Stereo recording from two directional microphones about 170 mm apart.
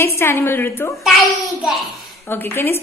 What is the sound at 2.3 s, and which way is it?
Speech, 15° left (ahead or behind).